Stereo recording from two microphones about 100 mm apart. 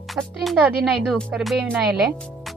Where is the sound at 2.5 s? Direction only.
Centre (ahead or behind).